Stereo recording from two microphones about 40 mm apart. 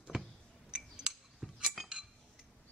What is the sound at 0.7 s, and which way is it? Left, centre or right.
Chink, centre.